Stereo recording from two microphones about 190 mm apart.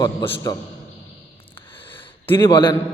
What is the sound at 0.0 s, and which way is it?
Speech, 15° left (ahead or behind).